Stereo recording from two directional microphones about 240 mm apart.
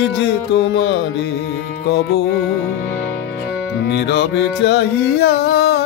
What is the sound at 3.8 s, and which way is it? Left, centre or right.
Music, left.